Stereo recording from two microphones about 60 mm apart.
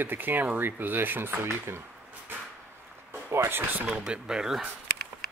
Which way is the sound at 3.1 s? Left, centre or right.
Right.